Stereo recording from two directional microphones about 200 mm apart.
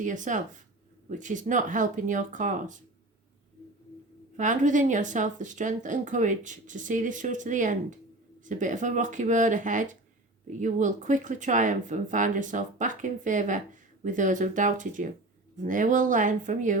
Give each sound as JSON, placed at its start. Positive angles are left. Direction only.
{"t": 0.0, "sound": "speech", "side_deg": -40}
{"t": 4.4, "sound": "speech", "side_deg": -40}